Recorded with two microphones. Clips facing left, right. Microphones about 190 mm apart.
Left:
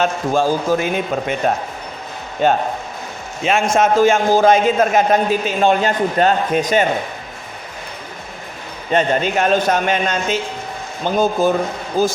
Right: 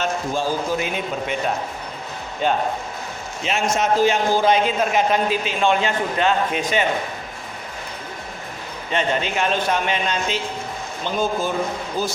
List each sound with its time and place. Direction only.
0.0 s a man's voice: 45° left (ahead or behind)
8.9 s a man's voice: 45° left (ahead or behind)